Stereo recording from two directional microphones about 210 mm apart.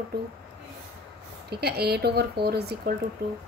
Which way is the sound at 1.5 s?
50° right (ahead or behind).